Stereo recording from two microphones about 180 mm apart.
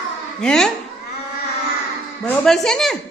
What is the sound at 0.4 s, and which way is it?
Speech, 5° left (ahead or behind).